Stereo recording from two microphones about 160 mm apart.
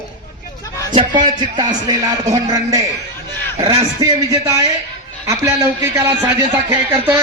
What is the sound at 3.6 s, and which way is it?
Speech, 35° right (ahead or behind).